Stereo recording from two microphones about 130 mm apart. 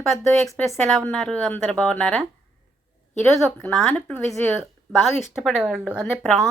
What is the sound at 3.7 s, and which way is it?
Speech, 5° left (ahead or behind).